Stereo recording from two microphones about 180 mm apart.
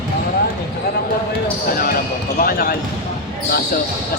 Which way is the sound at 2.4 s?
55° left (ahead or behind).